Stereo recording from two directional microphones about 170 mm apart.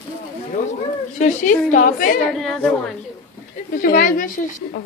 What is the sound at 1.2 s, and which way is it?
A woman's voice, 50° left (ahead or behind).